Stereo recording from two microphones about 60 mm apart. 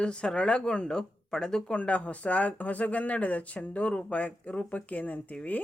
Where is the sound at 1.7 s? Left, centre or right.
Left.